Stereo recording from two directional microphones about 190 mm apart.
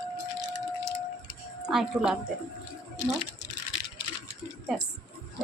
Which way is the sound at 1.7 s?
Centre (ahead or behind).